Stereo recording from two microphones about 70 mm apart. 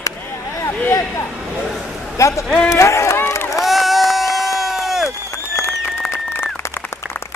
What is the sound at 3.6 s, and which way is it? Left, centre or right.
Run, centre.